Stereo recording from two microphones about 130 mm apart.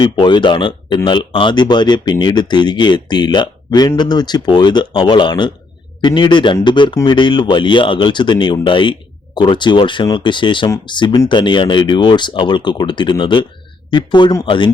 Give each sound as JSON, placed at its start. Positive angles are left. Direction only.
{"t": 0.0, "sound": "speech", "side_deg": 35}